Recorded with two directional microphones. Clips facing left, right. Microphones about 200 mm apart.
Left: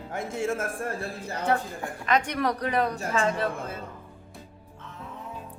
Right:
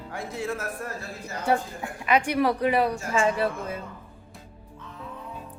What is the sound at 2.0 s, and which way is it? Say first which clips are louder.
Speech: right 3 dB; 10° right (ahead or behind).